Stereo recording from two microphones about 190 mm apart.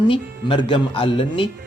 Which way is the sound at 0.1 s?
25° left (ahead or behind).